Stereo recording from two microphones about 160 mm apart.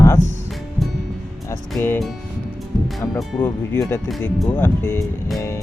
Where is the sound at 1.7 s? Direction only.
15° left (ahead or behind).